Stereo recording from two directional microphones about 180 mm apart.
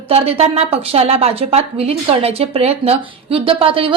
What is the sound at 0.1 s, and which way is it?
A woman's voice, 35° right (ahead or behind).